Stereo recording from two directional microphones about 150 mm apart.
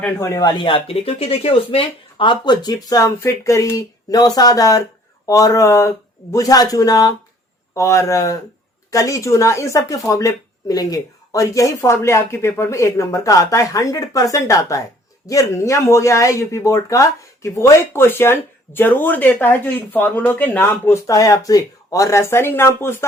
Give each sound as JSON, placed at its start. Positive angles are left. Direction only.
{"t": 0.2, "sound": "speech", "side_deg": 20}